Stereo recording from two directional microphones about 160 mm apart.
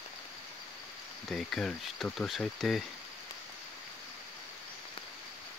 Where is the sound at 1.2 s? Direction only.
Centre (ahead or behind).